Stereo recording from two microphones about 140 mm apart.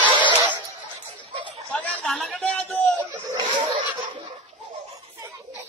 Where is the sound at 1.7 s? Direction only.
5° left (ahead or behind).